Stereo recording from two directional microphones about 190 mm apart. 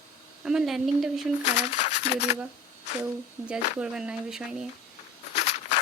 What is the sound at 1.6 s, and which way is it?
Speech, 35° left (ahead or behind).